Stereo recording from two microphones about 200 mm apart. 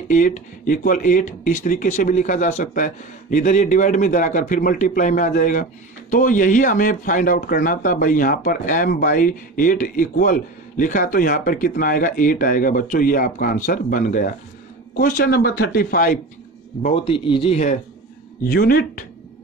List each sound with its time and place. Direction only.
0.1 s speech: 40° left (ahead or behind)
16.8 s speech: 30° left (ahead or behind)
18.4 s speech: 45° left (ahead or behind)